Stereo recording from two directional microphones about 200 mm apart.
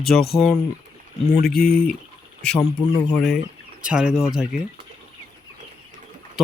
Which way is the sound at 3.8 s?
5° right (ahead or behind).